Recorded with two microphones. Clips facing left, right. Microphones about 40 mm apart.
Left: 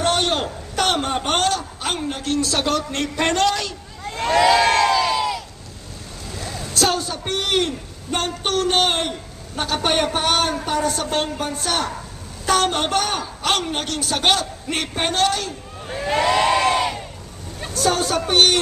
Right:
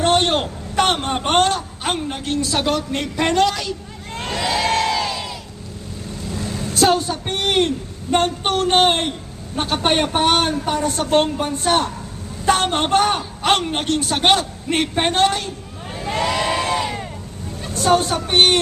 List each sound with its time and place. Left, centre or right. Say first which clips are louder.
0.0 s a man's voice: right 3 dB; right; by 3.8 s centre
4.2 s crowd: left 6 dB; left
6.7 s a man's voice: right 4 dB; centre
16.1 s crowd: left 3 dB; left
17.7 s a woman's voice: right 3 dB; right